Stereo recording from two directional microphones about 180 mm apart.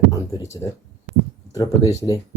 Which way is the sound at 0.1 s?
20° left (ahead or behind).